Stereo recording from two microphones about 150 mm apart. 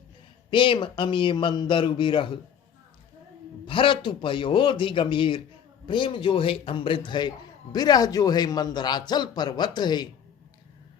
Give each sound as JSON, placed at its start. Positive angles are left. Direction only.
{"t": 0.5, "sound": "a man's voice", "side_deg": 35}
{"t": 3.7, "sound": "a man's voice", "side_deg": 35}